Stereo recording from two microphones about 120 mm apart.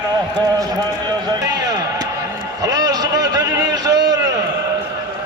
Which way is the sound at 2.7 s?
30° right (ahead or behind).